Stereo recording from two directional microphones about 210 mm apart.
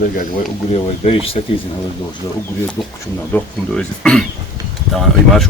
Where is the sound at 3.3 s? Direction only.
5° left (ahead or behind).